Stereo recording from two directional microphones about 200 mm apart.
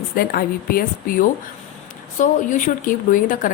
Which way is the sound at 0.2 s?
50° left (ahead or behind).